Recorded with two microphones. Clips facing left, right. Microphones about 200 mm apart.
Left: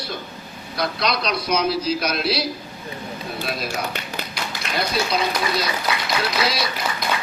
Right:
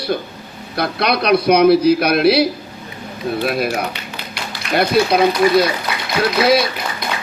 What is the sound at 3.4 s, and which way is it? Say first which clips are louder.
Speech: right 9 dB; 60° right (ahead or behind).